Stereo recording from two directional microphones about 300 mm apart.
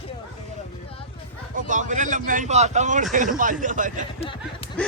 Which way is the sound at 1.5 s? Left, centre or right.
Right.